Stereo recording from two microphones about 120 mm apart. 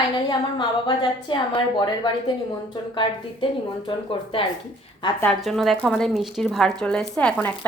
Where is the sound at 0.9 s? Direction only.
40° left (ahead or behind).